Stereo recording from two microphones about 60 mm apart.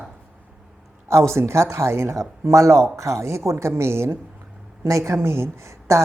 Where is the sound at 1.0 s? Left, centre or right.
Right.